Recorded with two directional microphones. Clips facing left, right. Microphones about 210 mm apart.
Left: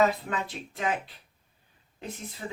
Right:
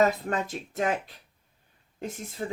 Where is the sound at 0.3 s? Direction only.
45° right (ahead or behind).